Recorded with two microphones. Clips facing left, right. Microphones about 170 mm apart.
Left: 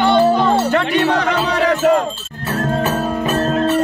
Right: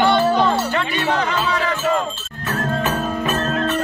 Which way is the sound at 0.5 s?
65° left (ahead or behind).